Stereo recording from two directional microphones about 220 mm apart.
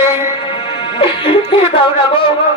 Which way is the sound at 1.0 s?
25° left (ahead or behind).